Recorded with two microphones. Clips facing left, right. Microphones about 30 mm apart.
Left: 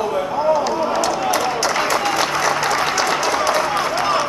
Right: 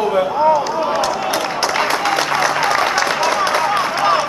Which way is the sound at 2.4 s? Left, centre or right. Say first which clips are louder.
Right 2 dB; right.